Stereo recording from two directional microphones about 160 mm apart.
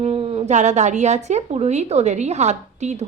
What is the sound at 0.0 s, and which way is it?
A woman's voice, 35° right (ahead or behind).